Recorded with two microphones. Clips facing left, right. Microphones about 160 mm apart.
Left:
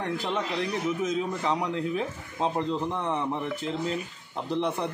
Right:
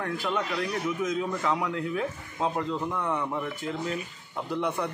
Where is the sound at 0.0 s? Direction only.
25° left (ahead or behind).